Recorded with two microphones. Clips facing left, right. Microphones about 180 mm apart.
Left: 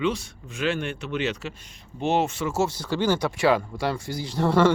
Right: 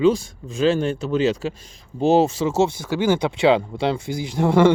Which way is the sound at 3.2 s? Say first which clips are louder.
Right 4 dB; 25° right (ahead or behind).